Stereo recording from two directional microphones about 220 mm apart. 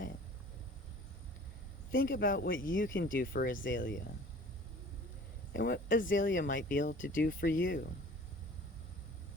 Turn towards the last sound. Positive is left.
turn(degrees=40)  # may be behind; listen again after turning